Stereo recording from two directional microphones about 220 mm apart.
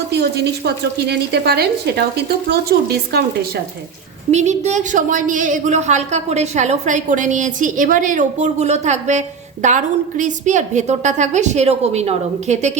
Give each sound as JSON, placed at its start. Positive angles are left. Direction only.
{"t": 0.1, "sound": "speech", "side_deg": -50}
{"t": 4.3, "sound": "a woman's voice", "side_deg": -30}